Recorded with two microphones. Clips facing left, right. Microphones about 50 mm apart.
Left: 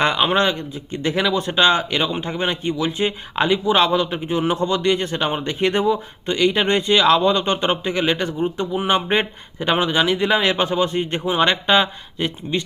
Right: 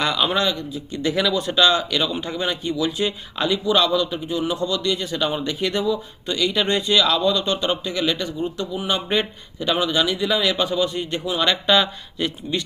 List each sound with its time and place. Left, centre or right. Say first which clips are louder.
0.0 s speech: left 3 dB; left